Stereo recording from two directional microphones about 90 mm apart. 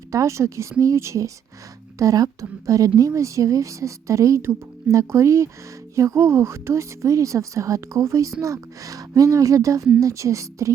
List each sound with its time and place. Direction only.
0.1 s speech: 35° right (ahead or behind)